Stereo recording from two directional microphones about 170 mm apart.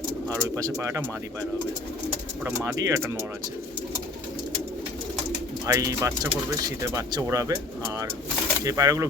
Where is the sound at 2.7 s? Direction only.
20° right (ahead or behind).